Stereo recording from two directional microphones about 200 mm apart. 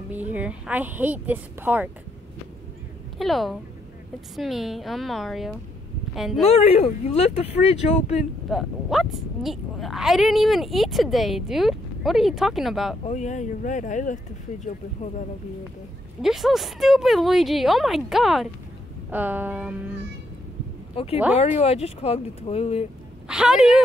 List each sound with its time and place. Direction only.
0.1 s a woman's voice: 10° right (ahead or behind)
3.2 s speech: centre (ahead or behind)
6.5 s speech: 30° left (ahead or behind)
8.5 s speech: centre (ahead or behind)
13.0 s speech: 35° left (ahead or behind)
16.2 s a woman's voice: centre (ahead or behind)
20.9 s speech: 30° left (ahead or behind)
23.2 s speech: 5° right (ahead or behind)